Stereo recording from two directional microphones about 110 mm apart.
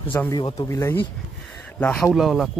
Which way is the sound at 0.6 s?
25° left (ahead or behind).